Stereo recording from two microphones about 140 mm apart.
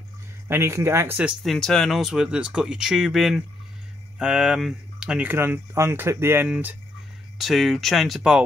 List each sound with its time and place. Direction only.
0.5 s speech: 20° right (ahead or behind)
1.4 s speech: 5° left (ahead or behind)
7.3 s speech: centre (ahead or behind)